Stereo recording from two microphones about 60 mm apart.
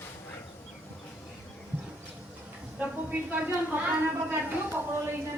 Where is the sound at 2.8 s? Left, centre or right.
Right.